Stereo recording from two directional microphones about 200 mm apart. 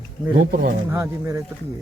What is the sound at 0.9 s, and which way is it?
Speech, 15° right (ahead or behind).